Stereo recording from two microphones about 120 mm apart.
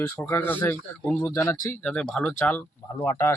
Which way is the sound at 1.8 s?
10° left (ahead or behind).